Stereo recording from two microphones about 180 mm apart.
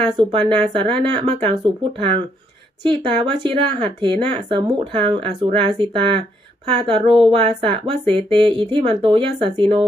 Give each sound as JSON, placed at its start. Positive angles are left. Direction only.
{"t": 0.2, "sound": "speech", "side_deg": -30}